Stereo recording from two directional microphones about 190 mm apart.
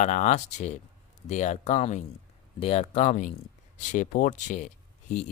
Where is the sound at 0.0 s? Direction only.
40° left (ahead or behind).